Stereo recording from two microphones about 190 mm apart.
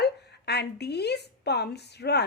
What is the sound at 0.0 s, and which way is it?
Speech, 60° left (ahead or behind).